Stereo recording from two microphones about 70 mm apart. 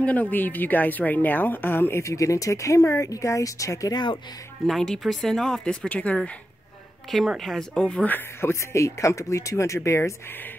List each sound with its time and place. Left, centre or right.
0.0 s a woman's voice: left
4.6 s speech: centre
7.1 s a woman's voice: centre
7.7 s speech: centre
8.1 s speech: left